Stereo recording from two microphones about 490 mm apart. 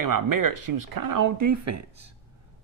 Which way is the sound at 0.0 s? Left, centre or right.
Right.